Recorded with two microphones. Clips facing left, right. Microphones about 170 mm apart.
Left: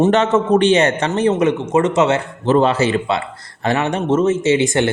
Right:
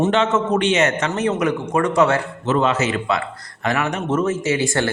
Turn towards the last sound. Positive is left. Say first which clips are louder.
# left 5 dB
turn(degrees=20)  # may be behind; listen again after turning